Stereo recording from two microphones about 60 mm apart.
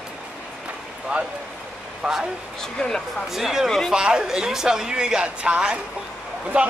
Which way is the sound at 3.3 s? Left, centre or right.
Centre.